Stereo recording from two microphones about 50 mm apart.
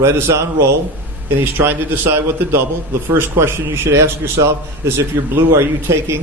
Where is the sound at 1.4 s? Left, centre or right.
Right.